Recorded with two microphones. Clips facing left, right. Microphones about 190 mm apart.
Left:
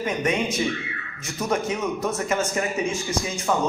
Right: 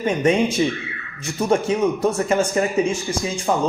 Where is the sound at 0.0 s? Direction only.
30° right (ahead or behind).